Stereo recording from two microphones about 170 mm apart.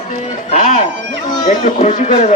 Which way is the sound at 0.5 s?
45° left (ahead or behind).